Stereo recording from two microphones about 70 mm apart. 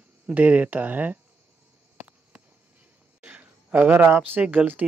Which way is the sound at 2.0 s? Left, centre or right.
Right.